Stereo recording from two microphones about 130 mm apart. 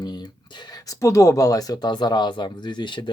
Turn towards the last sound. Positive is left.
turn(degrees=35)  # may be behind; listen again after turning